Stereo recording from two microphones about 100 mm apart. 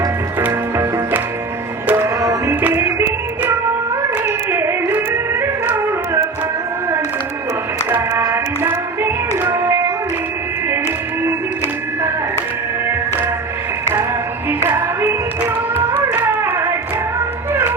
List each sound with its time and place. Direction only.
0.3 s music: 20° right (ahead or behind)
2.2 s music: 35° right (ahead or behind)
2.6 s music: 20° right (ahead or behind)
4.3 s music: 25° right (ahead or behind)
7.9 s music: 20° right (ahead or behind)
14.6 s music: 25° right (ahead or behind)